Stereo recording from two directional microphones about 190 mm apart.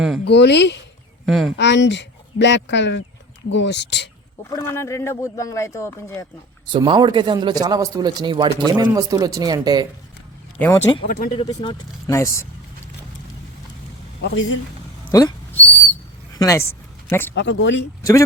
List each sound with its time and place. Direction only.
0.3 s speech: 65° left (ahead or behind)
1.2 s speech: centre (ahead or behind)
1.5 s speech: 65° left (ahead or behind)
4.4 s speech: 15° left (ahead or behind)
6.7 s a man's voice: 25° right (ahead or behind)
10.6 s speech: 10° left (ahead or behind)
11.0 s speech: 45° left (ahead or behind)
11.3 s speech: 25° left (ahead or behind)
14.2 s a woman's voice: 65° left (ahead or behind)
15.1 s a sound: 15° left (ahead or behind)
16.3 s speech: 15° left (ahead or behind)
17.3 s speech: 75° left (ahead or behind)